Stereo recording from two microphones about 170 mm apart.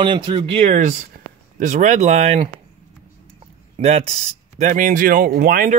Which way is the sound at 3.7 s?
40° right (ahead or behind).